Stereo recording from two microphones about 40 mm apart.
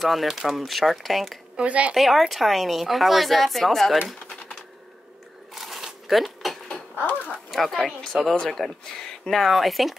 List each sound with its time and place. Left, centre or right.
0.0 s a woman's voice: centre
1.6 s a woman's voice: right
2.0 s a woman's voice: centre
5.5 s a sound: centre
6.0 s dishes: centre
7.5 s a woman's voice: centre
8.1 s speech: centre
8.5 s speech: centre